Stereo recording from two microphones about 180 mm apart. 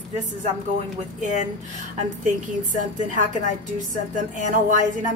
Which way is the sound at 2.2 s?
45° right (ahead or behind).